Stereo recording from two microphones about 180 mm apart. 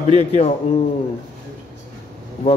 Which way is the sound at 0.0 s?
35° left (ahead or behind).